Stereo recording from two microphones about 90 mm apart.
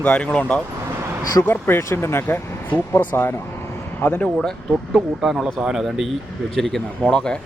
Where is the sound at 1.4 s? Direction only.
25° left (ahead or behind).